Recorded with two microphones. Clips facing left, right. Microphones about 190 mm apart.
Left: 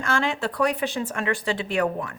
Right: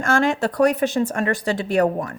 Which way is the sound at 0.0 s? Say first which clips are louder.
Right 6 dB; 45° right (ahead or behind).